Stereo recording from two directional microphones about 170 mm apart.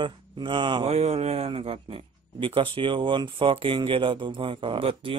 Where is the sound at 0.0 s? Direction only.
30° right (ahead or behind).